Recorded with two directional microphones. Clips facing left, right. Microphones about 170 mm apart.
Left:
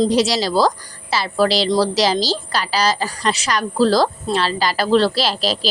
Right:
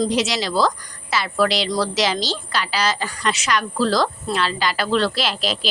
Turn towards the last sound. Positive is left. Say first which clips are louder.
# left 4 dB
turn(degrees=35)  # may be behind; listen again after turning